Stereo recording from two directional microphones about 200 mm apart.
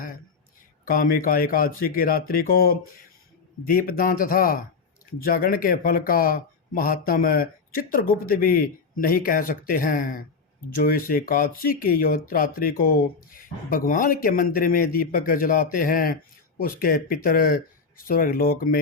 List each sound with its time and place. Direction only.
0.9 s speech: 45° left (ahead or behind)